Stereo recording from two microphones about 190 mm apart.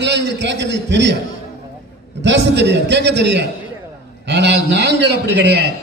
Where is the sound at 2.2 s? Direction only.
65° right (ahead or behind).